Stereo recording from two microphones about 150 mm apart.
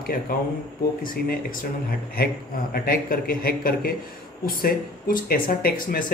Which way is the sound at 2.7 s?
85° left.